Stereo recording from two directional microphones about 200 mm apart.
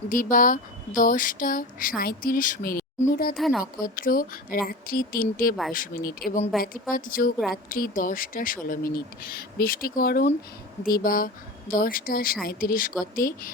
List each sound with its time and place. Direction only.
0.1 s speech: 40° left (ahead or behind)
3.3 s speech: centre (ahead or behind)
3.8 s speech: 45° left (ahead or behind)
6.5 s speech: centre (ahead or behind)
6.9 s speech: 45° left (ahead or behind)